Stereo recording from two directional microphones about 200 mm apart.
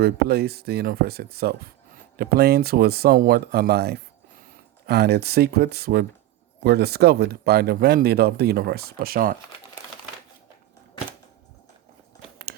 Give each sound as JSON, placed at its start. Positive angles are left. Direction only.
{"t": 0.0, "sound": "speech", "side_deg": -50}